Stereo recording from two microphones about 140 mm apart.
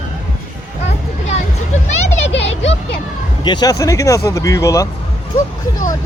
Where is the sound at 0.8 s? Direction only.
55° left (ahead or behind).